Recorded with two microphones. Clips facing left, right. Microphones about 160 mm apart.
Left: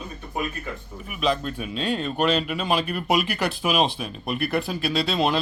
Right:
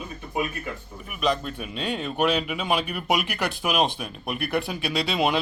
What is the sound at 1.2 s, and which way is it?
Speech, centre (ahead or behind).